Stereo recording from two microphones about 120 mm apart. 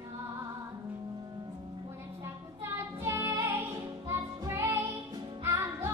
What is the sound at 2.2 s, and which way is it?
Music, 25° right (ahead or behind).